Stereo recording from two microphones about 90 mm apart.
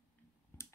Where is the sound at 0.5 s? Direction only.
25° left (ahead or behind).